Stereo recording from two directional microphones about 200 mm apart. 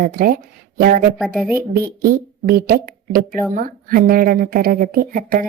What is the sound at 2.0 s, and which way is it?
A woman's voice, 45° right (ahead or behind).